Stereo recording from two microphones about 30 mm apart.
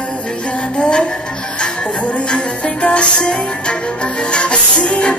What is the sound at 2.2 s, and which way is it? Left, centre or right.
Music, left.